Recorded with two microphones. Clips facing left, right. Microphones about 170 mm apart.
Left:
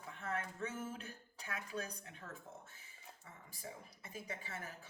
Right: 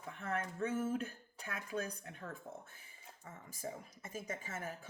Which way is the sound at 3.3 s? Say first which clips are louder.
Right 7 dB; 45° right (ahead or behind).